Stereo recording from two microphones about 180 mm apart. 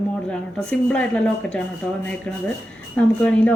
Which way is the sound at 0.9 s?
5° left (ahead or behind).